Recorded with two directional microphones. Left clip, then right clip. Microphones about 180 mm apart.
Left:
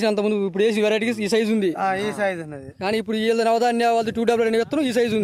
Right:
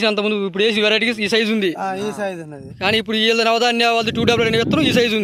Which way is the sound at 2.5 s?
Centre (ahead or behind).